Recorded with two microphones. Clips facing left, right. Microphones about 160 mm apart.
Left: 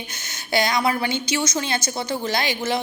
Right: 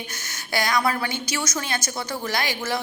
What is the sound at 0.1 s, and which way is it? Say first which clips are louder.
A woman's voice: left 8 dB; 20° left (ahead or behind).